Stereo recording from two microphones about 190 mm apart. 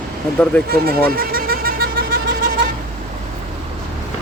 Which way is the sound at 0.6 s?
50° right (ahead or behind).